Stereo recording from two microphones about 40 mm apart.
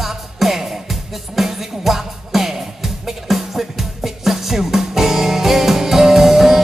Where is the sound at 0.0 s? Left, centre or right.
Centre.